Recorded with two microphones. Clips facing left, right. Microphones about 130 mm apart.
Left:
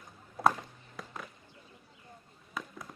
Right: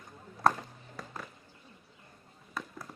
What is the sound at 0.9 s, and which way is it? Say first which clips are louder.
Music: even; centre (ahead or behind).